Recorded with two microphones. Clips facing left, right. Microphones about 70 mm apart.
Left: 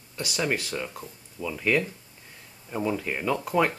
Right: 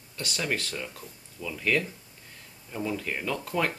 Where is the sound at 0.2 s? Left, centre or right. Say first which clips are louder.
Left 3 dB; centre.